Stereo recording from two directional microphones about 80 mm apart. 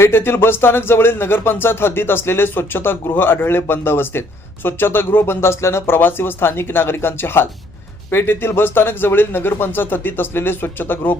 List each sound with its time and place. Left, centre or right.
0.0 s speech: left